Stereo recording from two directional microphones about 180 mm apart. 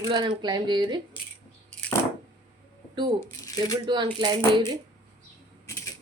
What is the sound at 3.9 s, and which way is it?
Speech, 25° right (ahead or behind).